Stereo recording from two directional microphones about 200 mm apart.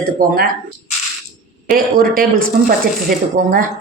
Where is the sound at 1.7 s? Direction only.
45° right (ahead or behind).